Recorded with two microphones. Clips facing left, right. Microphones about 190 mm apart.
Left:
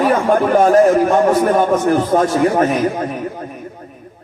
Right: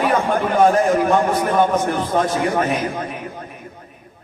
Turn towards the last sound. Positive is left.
turn(degrees=40)  # may be behind; listen again after turning